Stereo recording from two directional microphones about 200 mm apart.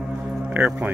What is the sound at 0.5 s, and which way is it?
Speech, 10° right (ahead or behind).